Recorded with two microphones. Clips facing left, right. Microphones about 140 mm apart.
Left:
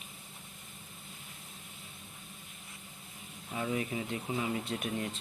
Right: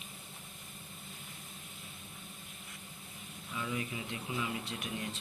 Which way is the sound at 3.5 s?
45° left (ahead or behind).